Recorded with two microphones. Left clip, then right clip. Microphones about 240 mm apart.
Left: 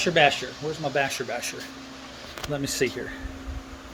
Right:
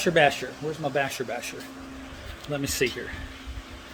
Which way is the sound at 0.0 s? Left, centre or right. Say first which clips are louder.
Left 1 dB; centre.